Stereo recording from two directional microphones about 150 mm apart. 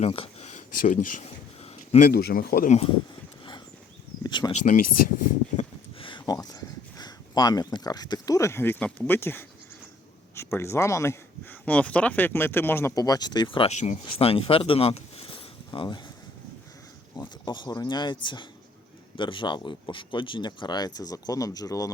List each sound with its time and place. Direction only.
0.0 s speech: 40° left (ahead or behind); by 1.2 s 55° left (ahead or behind)
2.0 s speech: 80° left
2.6 s speech: 45° left (ahead or behind)
4.2 s a sound: 30° left (ahead or behind)
4.6 s speech: 60° left (ahead or behind)
6.0 s speech: 30° left (ahead or behind)
13.7 s speech: 50° left (ahead or behind)
14.0 s speech: 40° left (ahead or behind)
17.2 s speech: 30° left (ahead or behind)